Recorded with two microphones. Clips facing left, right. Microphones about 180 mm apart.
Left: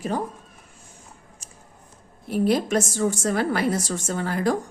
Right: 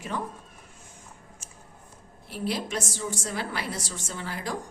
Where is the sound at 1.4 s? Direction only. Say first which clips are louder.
Left 1 dB; 35° left (ahead or behind).